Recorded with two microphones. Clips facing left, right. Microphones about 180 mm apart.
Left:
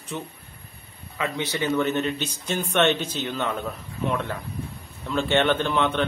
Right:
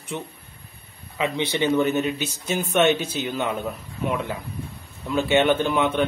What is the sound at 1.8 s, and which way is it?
Speech, 10° right (ahead or behind).